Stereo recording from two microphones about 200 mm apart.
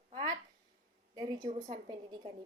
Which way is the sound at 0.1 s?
25° right (ahead or behind).